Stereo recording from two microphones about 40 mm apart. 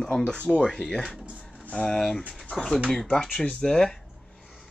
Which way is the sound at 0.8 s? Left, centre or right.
Centre.